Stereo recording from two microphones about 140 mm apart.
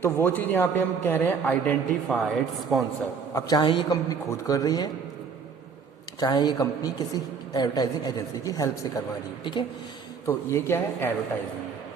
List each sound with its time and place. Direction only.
0.0 s a man's voice: 15° left (ahead or behind)
3.3 s a woman's voice: 30° left (ahead or behind)
6.1 s a woman's voice: 30° left (ahead or behind)
10.2 s a man's voice: 20° left (ahead or behind)